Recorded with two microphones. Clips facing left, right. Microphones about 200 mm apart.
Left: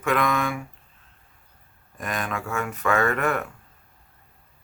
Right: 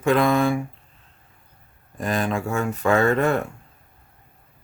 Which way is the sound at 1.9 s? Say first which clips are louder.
Right 6 dB; 30° right (ahead or behind).